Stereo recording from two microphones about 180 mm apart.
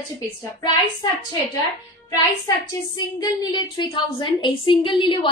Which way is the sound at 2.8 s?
20° left (ahead or behind).